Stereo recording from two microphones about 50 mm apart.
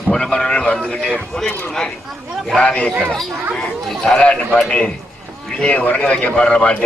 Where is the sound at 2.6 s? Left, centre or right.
Left.